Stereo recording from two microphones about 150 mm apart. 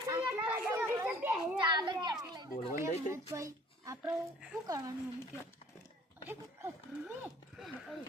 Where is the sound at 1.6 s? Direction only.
30° right (ahead or behind).